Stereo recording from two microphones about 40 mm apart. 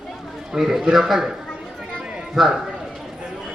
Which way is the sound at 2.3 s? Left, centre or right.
Centre.